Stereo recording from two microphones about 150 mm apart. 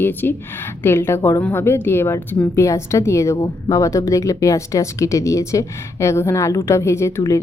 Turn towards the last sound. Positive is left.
turn(degrees=20)  # may be behind; listen again after turning